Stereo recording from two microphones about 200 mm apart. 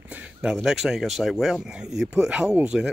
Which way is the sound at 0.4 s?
Centre (ahead or behind).